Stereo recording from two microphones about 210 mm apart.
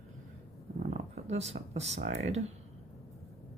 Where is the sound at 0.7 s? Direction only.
40° right (ahead or behind).